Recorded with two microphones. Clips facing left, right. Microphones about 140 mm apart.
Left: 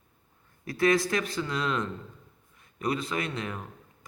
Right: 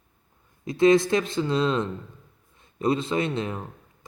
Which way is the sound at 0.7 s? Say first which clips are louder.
Right 6 dB; 20° right (ahead or behind).